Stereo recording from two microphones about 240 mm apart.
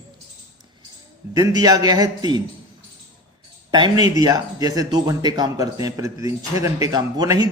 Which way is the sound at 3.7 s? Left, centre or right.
Centre.